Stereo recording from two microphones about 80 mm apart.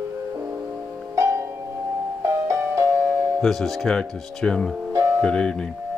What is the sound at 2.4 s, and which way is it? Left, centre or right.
Music, right.